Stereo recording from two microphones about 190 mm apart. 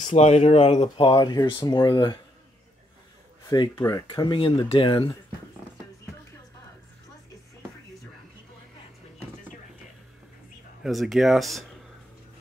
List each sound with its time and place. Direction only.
0.0 s speech: 35° left (ahead or behind)
3.4 s speech: 25° left (ahead or behind)
10.8 s speech: centre (ahead or behind)